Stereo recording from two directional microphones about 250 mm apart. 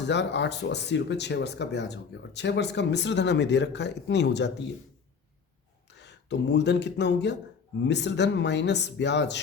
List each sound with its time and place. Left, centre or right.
0.1 s speech: left
5.9 s speech: left